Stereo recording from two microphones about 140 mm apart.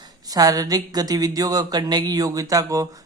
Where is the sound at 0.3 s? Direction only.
25° right (ahead or behind).